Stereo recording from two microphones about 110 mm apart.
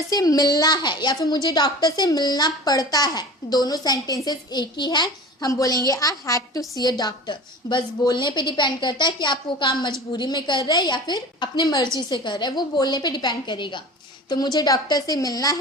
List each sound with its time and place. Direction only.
0.1 s a woman's voice: 35° left (ahead or behind)